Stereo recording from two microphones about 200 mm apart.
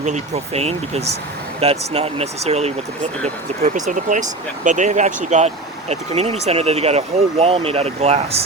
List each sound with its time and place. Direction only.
0.0 s speech: 35° right (ahead or behind)